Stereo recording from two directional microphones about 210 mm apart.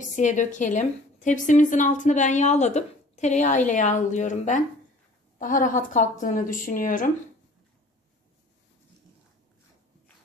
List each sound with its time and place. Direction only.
0.0 s a woman's voice: 35° left (ahead or behind)